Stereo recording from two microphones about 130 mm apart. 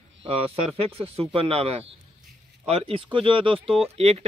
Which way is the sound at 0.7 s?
50° right (ahead or behind).